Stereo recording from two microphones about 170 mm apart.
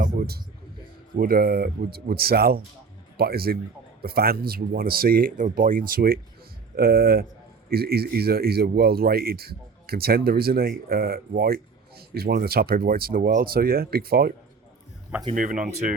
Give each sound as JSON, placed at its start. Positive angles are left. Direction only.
{"t": 0.0, "sound": "a sound", "side_deg": -65}
{"t": 1.1, "sound": "speech", "side_deg": -60}
{"t": 15.4, "sound": "speech", "side_deg": -50}